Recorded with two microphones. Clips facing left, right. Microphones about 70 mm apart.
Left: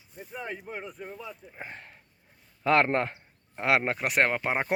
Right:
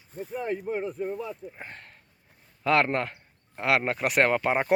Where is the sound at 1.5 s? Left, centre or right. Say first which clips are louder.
Left 1 dB; centre.